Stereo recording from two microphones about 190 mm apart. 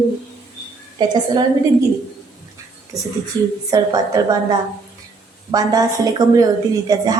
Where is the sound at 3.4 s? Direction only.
20° right (ahead or behind).